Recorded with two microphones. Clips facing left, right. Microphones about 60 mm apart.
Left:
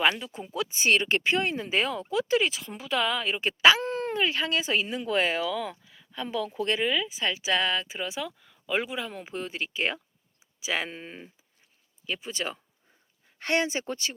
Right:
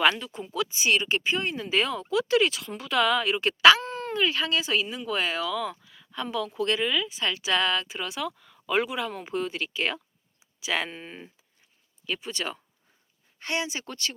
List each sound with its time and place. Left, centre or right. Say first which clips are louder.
0.0 s speech: right 2 dB; centre; by 1.5 s left
1.5 s speech: left 1 dB; left
1.7 s speech: right 3 dB; centre
3.8 s speech: even; left; by 9.5 s centre
9.5 s speech: right 1 dB; left
13.4 s speech: left 4 dB; left
13.7 s speech: left 3 dB; left